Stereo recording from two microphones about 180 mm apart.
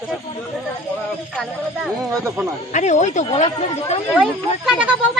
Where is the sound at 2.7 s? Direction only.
40° left (ahead or behind).